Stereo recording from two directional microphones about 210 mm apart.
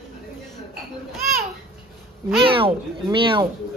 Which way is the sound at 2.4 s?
25° right (ahead or behind).